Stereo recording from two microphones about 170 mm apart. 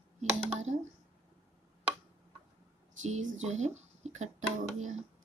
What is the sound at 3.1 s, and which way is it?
Speech, 45° right (ahead or behind).